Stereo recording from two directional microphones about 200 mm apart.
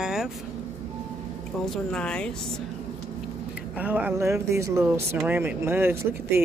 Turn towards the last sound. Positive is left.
turn(degrees=-10)  # may be behind; listen again after turning